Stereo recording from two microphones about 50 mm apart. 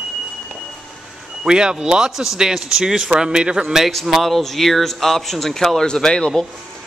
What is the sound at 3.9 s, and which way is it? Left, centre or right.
A man's voice, centre.